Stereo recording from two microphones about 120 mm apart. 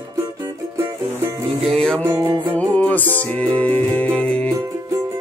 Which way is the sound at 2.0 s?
25° right (ahead or behind).